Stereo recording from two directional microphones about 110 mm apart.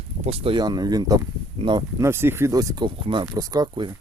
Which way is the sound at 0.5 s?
40° right (ahead or behind).